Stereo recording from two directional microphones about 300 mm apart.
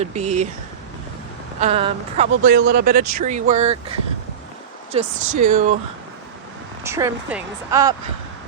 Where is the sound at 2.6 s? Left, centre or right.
Right.